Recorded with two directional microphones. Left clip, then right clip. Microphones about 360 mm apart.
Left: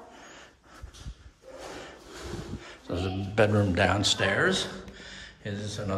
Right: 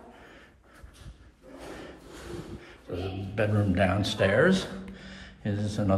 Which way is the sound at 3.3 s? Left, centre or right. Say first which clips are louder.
Left 5 dB; centre.